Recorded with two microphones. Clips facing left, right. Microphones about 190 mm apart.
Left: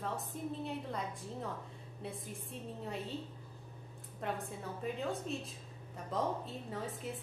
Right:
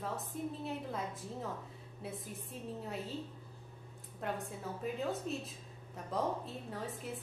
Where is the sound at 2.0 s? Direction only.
Centre (ahead or behind).